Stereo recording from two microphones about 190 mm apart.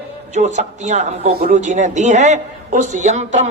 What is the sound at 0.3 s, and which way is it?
A man's voice, 35° right (ahead or behind).